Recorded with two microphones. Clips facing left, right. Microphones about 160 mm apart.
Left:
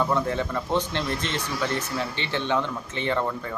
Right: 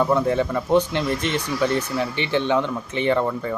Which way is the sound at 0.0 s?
15° right (ahead or behind).